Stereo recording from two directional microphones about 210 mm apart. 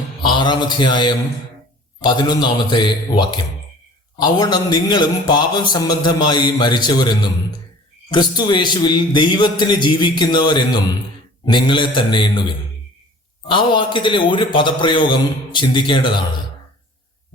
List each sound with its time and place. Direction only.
0.2 s a man's voice: 20° left (ahead or behind)